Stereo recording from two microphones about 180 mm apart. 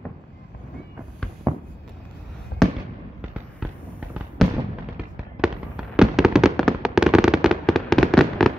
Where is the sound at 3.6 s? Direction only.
5° right (ahead or behind).